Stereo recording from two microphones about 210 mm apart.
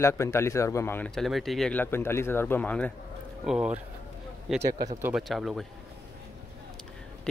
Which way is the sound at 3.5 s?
5° right (ahead or behind).